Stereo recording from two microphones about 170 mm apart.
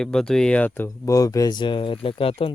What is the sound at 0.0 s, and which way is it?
Speech, 5° left (ahead or behind).